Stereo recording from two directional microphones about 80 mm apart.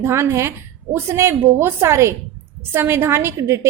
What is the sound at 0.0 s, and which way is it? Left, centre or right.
A woman's voice, right.